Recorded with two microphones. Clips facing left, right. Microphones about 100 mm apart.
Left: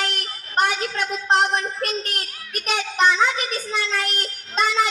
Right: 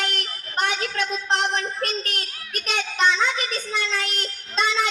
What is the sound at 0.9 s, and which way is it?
Speech, 50° left (ahead or behind).